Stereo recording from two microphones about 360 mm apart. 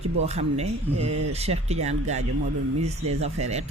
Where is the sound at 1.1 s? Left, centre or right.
Right.